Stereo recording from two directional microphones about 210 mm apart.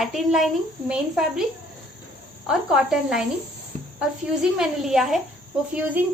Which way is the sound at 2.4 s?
5° right (ahead or behind).